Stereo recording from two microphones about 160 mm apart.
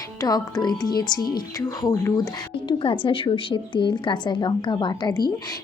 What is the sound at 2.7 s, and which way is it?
Speech, 35° left (ahead or behind).